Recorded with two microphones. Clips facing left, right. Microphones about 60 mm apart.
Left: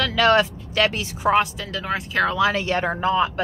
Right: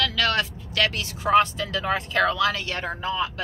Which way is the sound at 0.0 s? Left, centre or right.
Left.